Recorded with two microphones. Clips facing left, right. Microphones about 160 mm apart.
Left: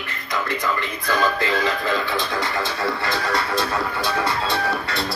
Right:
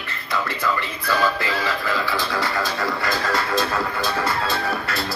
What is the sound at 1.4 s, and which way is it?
Speech, 20° left (ahead or behind).